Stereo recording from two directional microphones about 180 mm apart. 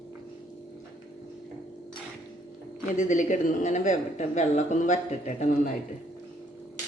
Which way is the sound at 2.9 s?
45° left (ahead or behind).